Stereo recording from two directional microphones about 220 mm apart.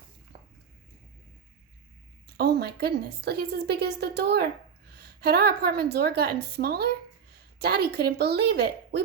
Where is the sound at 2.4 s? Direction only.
45° right (ahead or behind).